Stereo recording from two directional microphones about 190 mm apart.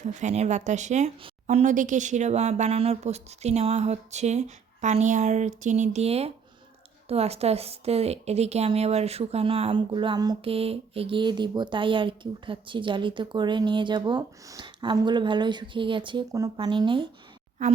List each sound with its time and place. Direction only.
0.0 s a woman's voice: 40° right (ahead or behind)